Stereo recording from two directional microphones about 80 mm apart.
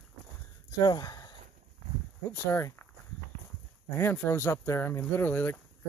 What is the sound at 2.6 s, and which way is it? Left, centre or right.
Speech, left.